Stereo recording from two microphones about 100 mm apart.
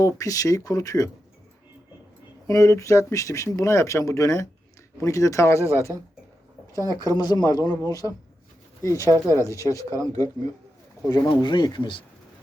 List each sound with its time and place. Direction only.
0.0 s speech: 35° left (ahead or behind)
2.5 s speech: 30° left (ahead or behind)
11.4 s speech: 50° left (ahead or behind)